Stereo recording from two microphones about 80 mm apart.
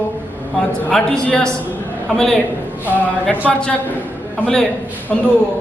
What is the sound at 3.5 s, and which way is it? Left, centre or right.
Speech, centre.